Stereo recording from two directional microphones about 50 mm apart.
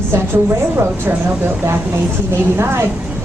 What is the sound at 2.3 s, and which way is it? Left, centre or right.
Speech, right.